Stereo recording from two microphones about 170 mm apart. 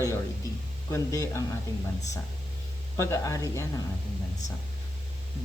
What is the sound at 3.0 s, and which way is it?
Speech, 20° left (ahead or behind).